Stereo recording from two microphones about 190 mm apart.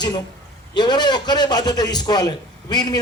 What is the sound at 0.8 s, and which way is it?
A man's voice, 20° left (ahead or behind).